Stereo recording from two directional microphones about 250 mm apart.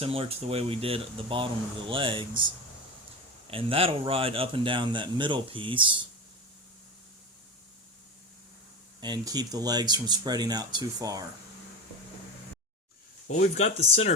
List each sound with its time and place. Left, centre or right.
0.0 s speech: right
3.4 s speech: right
9.0 s speech: centre
13.2 s speech: left